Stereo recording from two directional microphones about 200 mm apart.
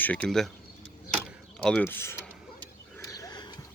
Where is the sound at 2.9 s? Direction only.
15° left (ahead or behind).